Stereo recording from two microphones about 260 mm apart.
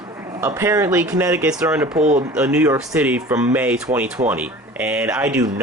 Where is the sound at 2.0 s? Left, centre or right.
Right.